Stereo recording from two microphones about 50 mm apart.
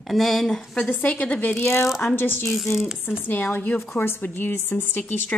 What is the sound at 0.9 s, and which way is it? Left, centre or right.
Speech, left.